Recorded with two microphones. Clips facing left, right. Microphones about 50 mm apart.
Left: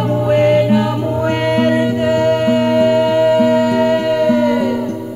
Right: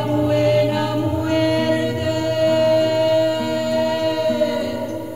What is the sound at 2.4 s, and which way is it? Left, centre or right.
Music, left.